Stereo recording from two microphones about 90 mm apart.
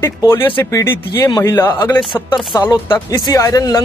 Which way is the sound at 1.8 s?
50° left (ahead or behind).